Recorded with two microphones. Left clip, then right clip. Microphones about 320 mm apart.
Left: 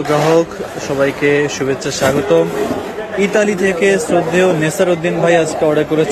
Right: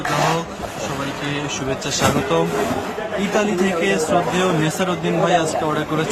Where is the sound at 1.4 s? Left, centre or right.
Centre.